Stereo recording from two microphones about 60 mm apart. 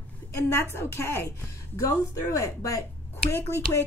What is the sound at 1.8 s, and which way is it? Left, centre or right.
Speech, left.